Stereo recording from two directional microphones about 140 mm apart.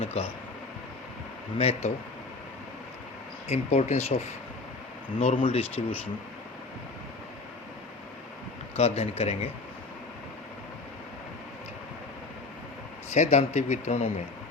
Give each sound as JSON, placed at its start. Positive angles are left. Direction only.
{"t": 0.0, "sound": "a sound", "side_deg": 50}
{"t": 1.5, "sound": "speech", "side_deg": 50}
{"t": 3.5, "sound": "speech", "side_deg": 50}
{"t": 5.4, "sound": "speech", "side_deg": 45}
{"t": 8.7, "sound": "speech", "side_deg": 50}
{"t": 13.1, "sound": "speech", "side_deg": 55}